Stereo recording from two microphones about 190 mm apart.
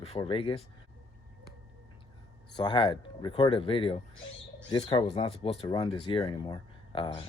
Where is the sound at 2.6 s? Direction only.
25° left (ahead or behind).